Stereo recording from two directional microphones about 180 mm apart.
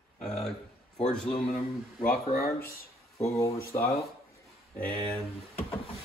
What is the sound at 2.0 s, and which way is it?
Speech, 55° left (ahead or behind).